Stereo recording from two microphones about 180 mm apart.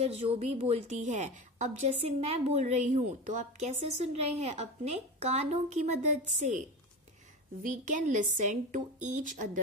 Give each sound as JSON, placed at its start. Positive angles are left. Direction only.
{"t": 0.0, "sound": "a woman's voice", "side_deg": -35}
{"t": 7.6, "sound": "a woman's voice", "side_deg": -45}